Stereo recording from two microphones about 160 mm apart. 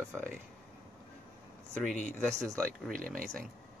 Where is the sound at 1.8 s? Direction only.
5° left (ahead or behind).